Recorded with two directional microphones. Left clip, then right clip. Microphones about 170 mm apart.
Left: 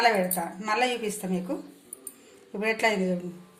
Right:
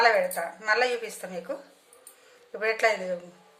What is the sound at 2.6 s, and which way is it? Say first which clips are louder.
Speech: right 1 dB; 30° right (ahead or behind).